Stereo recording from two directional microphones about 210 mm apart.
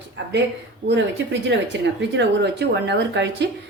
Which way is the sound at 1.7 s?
55° right (ahead or behind).